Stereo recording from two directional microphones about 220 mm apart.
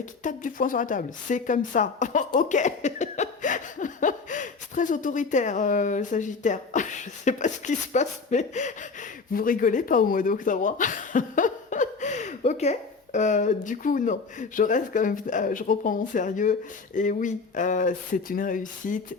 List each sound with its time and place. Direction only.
0.2 s speech: 35° left (ahead or behind)